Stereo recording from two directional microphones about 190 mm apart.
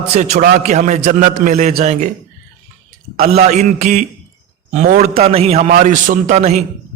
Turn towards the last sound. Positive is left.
turn(degrees=-35)  # may be behind; listen again after turning